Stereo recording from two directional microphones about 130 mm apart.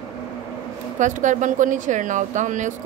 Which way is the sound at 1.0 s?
70° right (ahead or behind).